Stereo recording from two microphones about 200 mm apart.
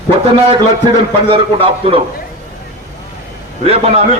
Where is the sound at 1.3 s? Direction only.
25° right (ahead or behind).